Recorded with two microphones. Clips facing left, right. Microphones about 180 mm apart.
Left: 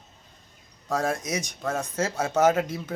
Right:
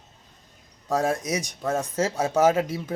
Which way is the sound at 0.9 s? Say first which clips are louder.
Right 3 dB; 15° right (ahead or behind).